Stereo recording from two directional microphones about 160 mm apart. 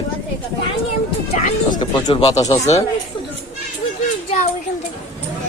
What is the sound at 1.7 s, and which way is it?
Speech, 30° left (ahead or behind).